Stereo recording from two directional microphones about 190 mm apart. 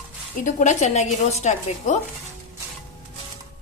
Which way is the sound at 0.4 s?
40° left (ahead or behind).